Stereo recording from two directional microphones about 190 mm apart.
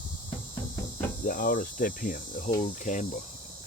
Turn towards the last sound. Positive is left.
turn(degrees=40)  # may be behind; listen again after turning